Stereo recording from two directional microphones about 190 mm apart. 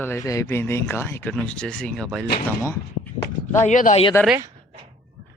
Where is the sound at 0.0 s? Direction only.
15° left (ahead or behind).